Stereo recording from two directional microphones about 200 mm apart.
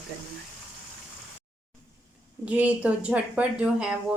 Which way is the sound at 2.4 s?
5° right (ahead or behind).